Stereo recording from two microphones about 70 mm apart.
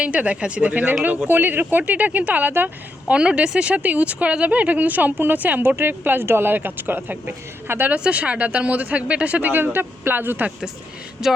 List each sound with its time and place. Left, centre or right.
0.0 s speech: centre
3.1 s speech: centre
7.9 s speech: centre
11.2 s music: centre